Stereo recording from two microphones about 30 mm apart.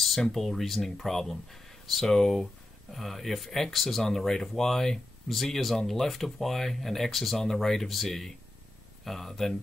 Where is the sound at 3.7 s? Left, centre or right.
Centre.